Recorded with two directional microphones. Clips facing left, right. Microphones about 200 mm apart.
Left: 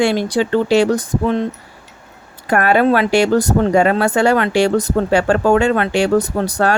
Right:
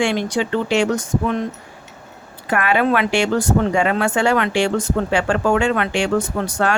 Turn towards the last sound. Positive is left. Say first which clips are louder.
# left 3 dB
turn(degrees=35)  # may be behind; listen again after turning